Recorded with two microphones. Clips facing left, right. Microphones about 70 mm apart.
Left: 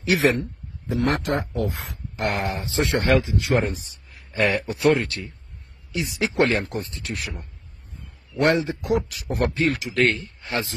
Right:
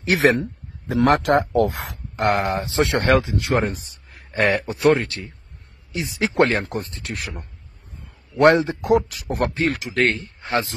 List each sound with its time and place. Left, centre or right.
0.0 s speech: right
0.4 s a man's voice: right
1.1 s speech: right
2.1 s speech: right
9.9 s speech: right